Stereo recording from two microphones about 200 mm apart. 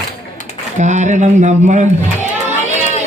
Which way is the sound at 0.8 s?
35° right (ahead or behind).